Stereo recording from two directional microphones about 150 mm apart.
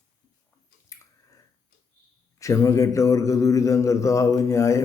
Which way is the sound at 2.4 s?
20° left (ahead or behind).